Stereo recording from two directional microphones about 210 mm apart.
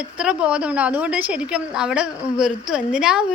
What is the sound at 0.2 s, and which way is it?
A woman's voice, 5° right (ahead or behind).